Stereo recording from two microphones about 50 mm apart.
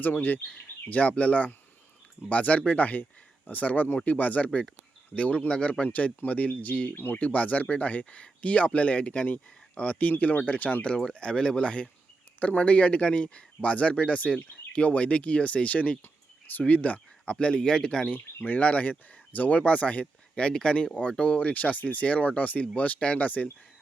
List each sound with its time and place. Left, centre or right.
0.0 s speech: left
6.9 s speech: left
7.2 s speech: left
10.9 s speech: centre
17.3 s speech: centre
18.4 s speech: left
20.3 s speech: centre